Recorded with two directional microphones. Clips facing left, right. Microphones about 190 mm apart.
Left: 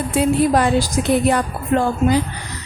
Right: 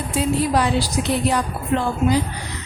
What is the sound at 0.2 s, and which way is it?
A woman's voice, 50° left (ahead or behind).